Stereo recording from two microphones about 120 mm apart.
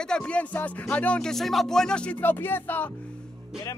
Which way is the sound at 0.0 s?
5° left (ahead or behind).